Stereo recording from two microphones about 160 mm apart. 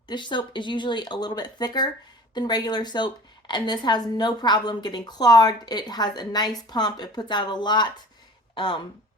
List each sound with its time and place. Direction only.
0.1 s a woman's voice: 30° left (ahead or behind)